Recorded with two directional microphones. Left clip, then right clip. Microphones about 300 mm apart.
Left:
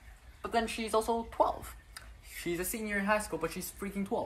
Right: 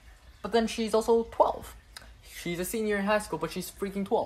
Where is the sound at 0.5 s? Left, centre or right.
Right.